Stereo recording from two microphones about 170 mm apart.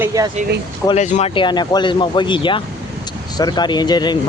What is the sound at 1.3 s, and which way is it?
Speech, 30° left (ahead or behind).